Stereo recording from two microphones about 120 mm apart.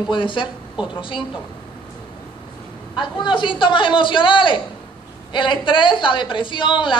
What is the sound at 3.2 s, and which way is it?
A woman's voice, 40° left (ahead or behind).